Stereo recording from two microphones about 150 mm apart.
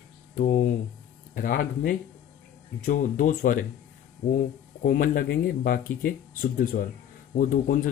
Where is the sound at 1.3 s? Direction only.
70° left (ahead or behind).